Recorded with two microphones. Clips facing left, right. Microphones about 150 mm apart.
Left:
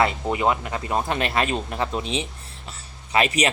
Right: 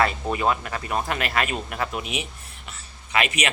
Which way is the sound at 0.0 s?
20° left (ahead or behind).